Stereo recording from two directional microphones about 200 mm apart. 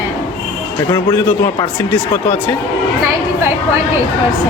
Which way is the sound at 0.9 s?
15° left (ahead or behind).